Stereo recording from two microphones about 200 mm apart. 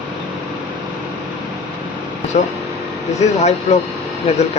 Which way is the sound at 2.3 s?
35° left (ahead or behind).